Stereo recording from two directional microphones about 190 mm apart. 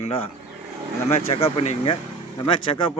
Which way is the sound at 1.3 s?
30° left (ahead or behind).